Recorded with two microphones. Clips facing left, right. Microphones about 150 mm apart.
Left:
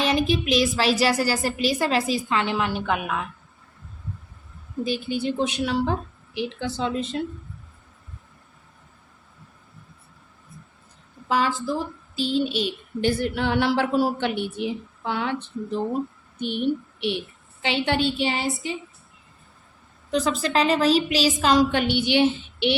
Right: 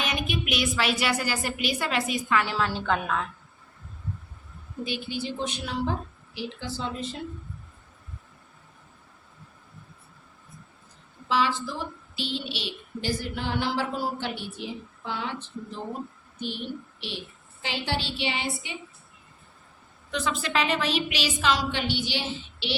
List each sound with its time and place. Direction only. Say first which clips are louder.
0.0 s speech: left 8 dB; 35° left (ahead or behind); by 3.2 s 15° left (ahead or behind)
4.9 s a woman's voice: left 6 dB; 50° left (ahead or behind)
5.5 s speech: left 6 dB; 75° left (ahead or behind)
11.3 s a woman's voice: left 3 dB; 45° left (ahead or behind)
17.6 s a woman's voice: left 8 dB; 70° left (ahead or behind); by 18.8 s 40° left (ahead or behind)
20.1 s speech: left 6 dB; 40° left (ahead or behind); by 22.7 s 60° left (ahead or behind)